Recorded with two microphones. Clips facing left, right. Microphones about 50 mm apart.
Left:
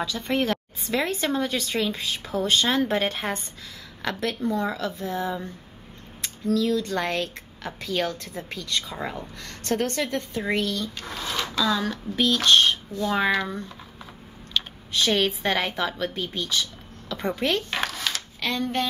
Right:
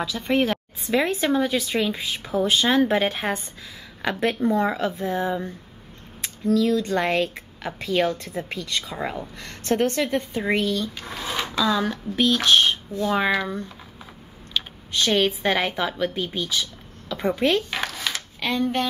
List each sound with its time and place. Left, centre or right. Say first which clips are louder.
0.0 s speech: right 3 dB; centre
4.0 s speech: right 4 dB; right
12.4 s speech: left 2 dB; centre
15.0 s speech: right 2 dB; centre